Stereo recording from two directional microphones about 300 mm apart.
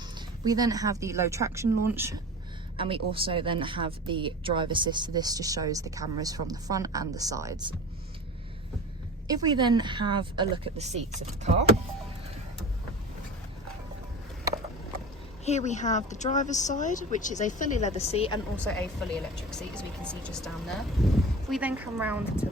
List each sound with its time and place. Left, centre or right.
0.4 s speech: centre
9.2 s speech: centre
15.4 s speech: left
18.6 s speech: centre